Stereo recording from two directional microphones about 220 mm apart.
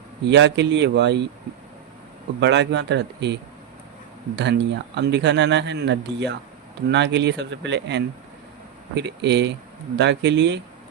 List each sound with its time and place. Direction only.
0.3 s speech: 50° right (ahead or behind)
2.4 s speech: 50° right (ahead or behind)